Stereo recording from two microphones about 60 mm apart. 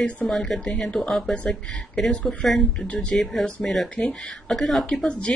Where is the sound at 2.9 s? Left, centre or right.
Centre.